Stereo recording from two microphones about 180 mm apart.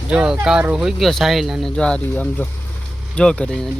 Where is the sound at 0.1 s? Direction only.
5° right (ahead or behind).